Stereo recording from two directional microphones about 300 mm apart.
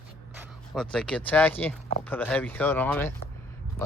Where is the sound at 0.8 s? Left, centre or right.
Centre.